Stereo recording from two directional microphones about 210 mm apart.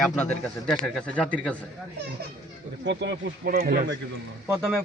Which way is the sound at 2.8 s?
55° right (ahead or behind).